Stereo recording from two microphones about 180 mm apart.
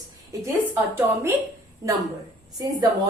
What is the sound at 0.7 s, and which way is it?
Speech, 10° right (ahead or behind).